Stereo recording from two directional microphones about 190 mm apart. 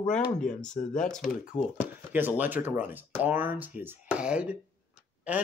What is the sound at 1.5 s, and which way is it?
Speech, 30° left (ahead or behind).